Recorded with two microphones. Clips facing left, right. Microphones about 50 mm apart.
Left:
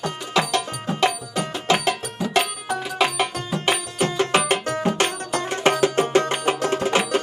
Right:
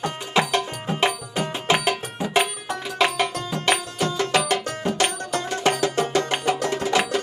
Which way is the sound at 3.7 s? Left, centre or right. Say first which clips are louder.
Right 1 dB; left.